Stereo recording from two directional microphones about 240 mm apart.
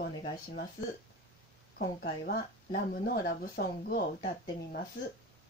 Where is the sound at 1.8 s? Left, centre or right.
Left.